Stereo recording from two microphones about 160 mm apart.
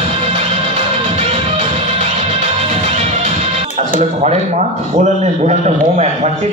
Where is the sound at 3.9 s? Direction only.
45° right (ahead or behind).